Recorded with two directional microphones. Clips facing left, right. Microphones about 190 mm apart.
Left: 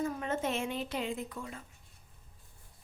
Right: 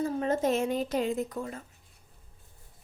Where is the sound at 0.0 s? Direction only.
35° right (ahead or behind).